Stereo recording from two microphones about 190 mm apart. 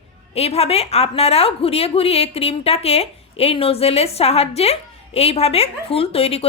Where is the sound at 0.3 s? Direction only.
30° left (ahead or behind).